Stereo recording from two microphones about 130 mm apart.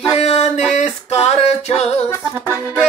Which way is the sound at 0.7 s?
55° left (ahead or behind).